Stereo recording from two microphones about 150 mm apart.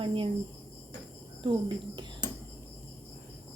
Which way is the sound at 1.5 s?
30° right (ahead or behind).